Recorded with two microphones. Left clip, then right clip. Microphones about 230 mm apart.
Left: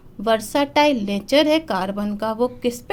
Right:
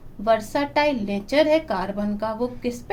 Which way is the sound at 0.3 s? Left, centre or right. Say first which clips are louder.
Left 2 dB; left.